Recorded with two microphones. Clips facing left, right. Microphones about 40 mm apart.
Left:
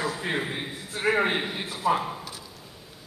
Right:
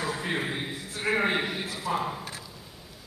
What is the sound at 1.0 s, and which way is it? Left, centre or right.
Speech, left.